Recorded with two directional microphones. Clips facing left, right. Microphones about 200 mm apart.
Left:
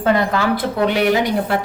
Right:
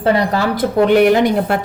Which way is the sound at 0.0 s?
35° right (ahead or behind).